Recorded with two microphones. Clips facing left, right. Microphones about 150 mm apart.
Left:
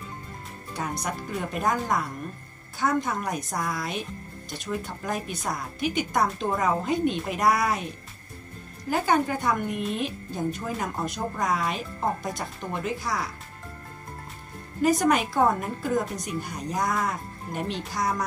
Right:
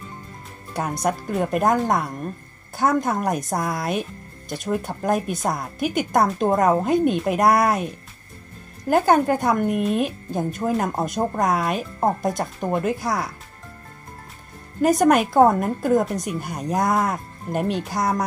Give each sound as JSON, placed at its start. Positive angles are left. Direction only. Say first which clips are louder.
{"t": 0.7, "sound": "a woman's voice", "louder": "right 7 dB", "side_deg": -50}
{"t": 12.0, "sound": "a woman's voice", "louder": "right 8 dB", "side_deg": -50}
{"t": 14.8, "sound": "a woman's voice", "louder": "right 5 dB", "side_deg": -50}